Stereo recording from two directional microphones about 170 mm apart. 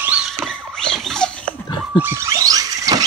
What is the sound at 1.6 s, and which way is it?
Pig, 25° left (ahead or behind).